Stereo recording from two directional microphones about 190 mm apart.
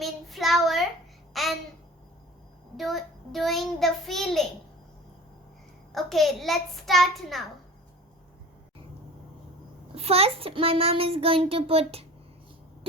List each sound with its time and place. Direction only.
0.0 s a child's voice: centre (ahead or behind)
1.3 s babbling: centre (ahead or behind)
2.7 s a child's voice: centre (ahead or behind)
5.9 s a child's voice: centre (ahead or behind)
9.9 s a child's voice: 30° right (ahead or behind)